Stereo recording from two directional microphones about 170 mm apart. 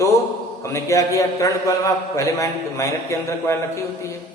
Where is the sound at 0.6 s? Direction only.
20° left (ahead or behind).